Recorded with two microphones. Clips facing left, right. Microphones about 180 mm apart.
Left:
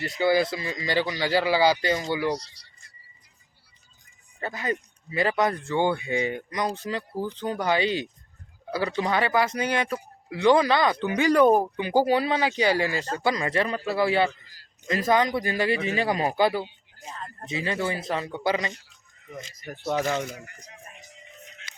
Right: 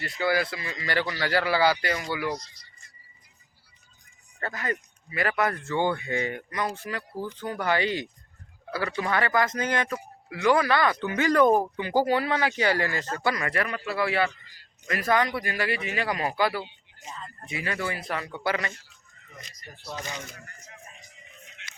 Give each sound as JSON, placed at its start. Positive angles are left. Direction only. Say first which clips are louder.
{"t": 0.0, "sound": "speech", "louder": "left 4 dB", "side_deg": 25}
{"t": 0.9, "sound": "speech", "louder": "left 2 dB", "side_deg": 15}
{"t": 4.4, "sound": "speech", "louder": "left 2 dB", "side_deg": 15}
{"t": 4.7, "sound": "speech", "louder": "left 3 dB", "side_deg": 25}
{"t": 14.4, "sound": "a man's voice", "louder": "left 1 dB", "side_deg": 40}
{"t": 14.8, "sound": "speech", "louder": "left 2 dB", "side_deg": 20}
{"t": 19.9, "sound": "speech", "louder": "left 11 dB", "side_deg": 80}
{"t": 20.3, "sound": "speech", "louder": "left 6 dB", "side_deg": 15}